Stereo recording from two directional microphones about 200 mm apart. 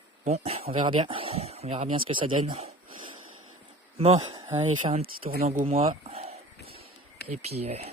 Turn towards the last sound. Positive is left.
turn(degrees=-30)  # may be behind; listen again after turning